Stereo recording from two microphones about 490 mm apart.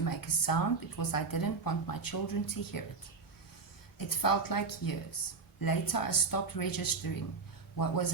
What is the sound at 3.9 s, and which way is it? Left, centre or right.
Speech, left.